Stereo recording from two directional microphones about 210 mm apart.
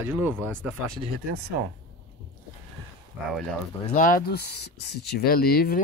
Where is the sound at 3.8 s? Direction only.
35° left (ahead or behind).